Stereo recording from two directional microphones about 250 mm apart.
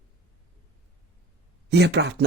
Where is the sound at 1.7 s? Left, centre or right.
Right.